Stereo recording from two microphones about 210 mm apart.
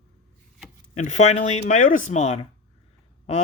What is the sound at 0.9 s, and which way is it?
Speech, 35° left (ahead or behind).